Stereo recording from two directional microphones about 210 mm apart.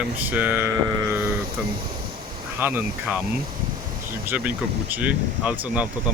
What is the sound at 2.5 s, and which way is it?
Speech, 10° right (ahead or behind).